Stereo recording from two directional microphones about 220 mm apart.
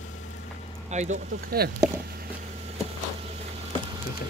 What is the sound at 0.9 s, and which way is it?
Speech, 35° right (ahead or behind).